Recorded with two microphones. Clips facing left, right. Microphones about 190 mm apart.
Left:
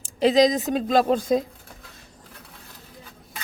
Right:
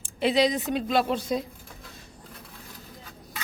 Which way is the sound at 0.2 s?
40° left (ahead or behind).